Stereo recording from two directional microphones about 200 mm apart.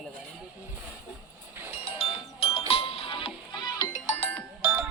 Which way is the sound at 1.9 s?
30° left (ahead or behind).